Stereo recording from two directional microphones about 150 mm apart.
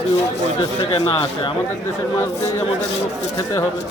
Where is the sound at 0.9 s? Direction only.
30° left (ahead or behind).